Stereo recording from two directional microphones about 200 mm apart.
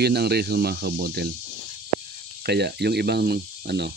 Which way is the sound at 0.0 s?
55° right (ahead or behind).